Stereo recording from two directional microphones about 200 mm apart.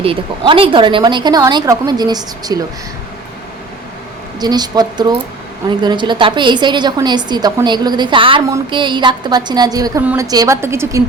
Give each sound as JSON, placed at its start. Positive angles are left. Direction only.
{"t": 0.0, "sound": "a woman's voice", "side_deg": -25}
{"t": 4.4, "sound": "a woman's voice", "side_deg": -20}